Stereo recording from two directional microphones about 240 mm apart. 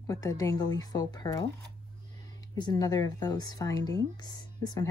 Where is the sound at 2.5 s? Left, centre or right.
Centre.